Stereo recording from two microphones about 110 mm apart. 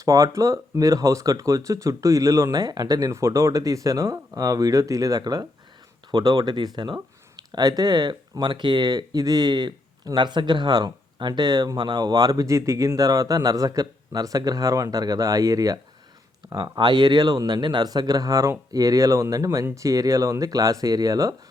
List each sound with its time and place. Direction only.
0.0 s speech: 30° right (ahead or behind)